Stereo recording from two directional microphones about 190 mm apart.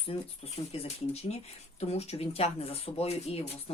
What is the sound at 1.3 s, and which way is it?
Speech, 35° left (ahead or behind).